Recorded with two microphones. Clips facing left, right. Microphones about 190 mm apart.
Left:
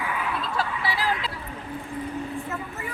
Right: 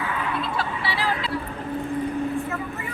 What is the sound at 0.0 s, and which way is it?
Fowl, 10° left (ahead or behind).